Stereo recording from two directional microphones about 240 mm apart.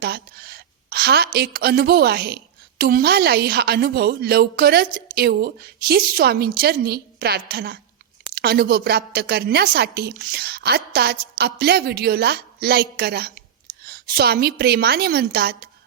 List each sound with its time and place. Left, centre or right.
0.0 s a woman's voice: right